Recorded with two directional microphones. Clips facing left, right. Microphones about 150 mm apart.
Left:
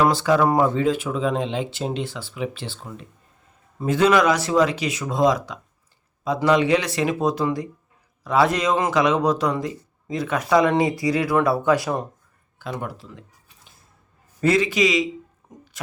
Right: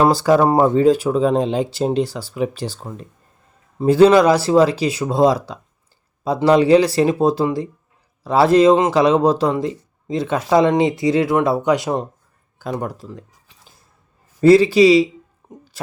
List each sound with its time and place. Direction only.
0.0 s speech: 35° right (ahead or behind); by 12.0 s 20° right (ahead or behind)
12.5 s speech: 40° right (ahead or behind)
14.4 s speech: 30° right (ahead or behind)
15.4 s a sound: 25° right (ahead or behind)